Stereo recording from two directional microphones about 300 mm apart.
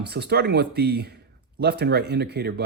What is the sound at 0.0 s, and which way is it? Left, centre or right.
Speech, right.